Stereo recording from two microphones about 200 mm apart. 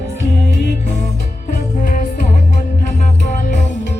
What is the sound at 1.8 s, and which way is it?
Music, 40° left (ahead or behind).